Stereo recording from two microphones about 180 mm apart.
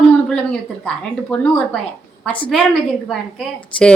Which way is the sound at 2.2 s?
25° left (ahead or behind).